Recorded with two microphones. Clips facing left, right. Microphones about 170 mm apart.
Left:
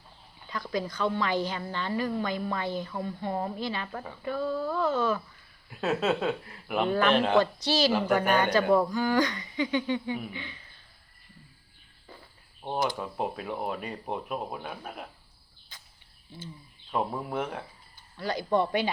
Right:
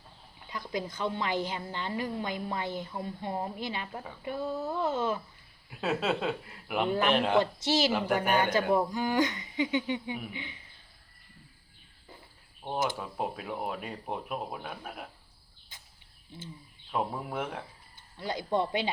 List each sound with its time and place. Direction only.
0.4 s speech: 20° right (ahead or behind)
5.7 s speech: centre (ahead or behind); by 7.9 s 20° right (ahead or behind)
8.0 s speech: 10° right (ahead or behind)
8.7 s speech: 20° right (ahead or behind)
12.6 s speech: 15° left (ahead or behind)
13.0 s speech: centre (ahead or behind)
16.9 s speech: 5° left (ahead or behind)
18.2 s speech: 20° right (ahead or behind)